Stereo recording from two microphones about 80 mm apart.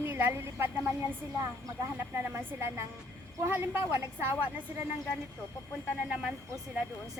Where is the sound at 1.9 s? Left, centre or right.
Right.